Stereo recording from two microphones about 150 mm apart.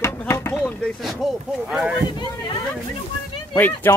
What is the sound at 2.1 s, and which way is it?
Speech, 30° left (ahead or behind).